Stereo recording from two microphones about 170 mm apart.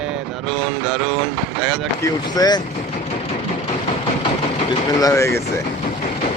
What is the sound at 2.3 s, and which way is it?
Vehicle, 25° left (ahead or behind).